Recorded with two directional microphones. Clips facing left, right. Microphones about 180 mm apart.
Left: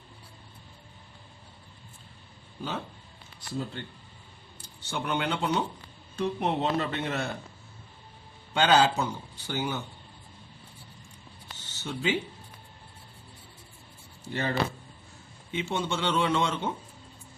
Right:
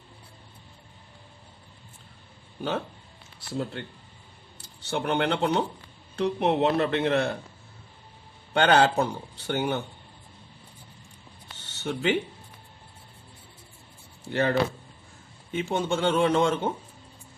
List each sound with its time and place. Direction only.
2.6 s speech: 65° right (ahead or behind)
4.5 s speech: 65° right (ahead or behind)
8.5 s speech: 60° right (ahead or behind)
11.5 s a sound: 65° right (ahead or behind)
14.3 s speech: 60° right (ahead or behind)
15.7 s speech: 45° right (ahead or behind)